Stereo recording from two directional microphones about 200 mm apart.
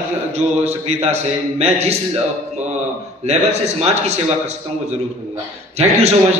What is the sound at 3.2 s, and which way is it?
A man's voice, 35° right (ahead or behind).